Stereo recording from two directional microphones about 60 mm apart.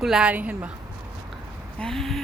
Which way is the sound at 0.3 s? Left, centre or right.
Right.